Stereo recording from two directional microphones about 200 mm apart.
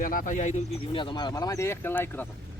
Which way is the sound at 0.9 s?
25° left (ahead or behind).